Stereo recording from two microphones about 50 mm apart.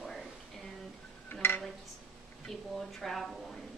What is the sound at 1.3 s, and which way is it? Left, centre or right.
Dishes, left.